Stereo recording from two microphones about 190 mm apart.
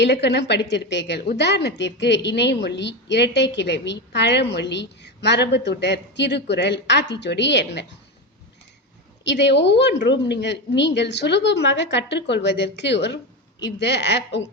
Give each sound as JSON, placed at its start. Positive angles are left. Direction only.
{"t": 0.0, "sound": "a woman's voice", "side_deg": 60}
{"t": 9.2, "sound": "a woman's voice", "side_deg": 65}